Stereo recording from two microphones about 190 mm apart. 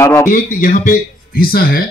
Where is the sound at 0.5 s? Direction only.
45° left (ahead or behind).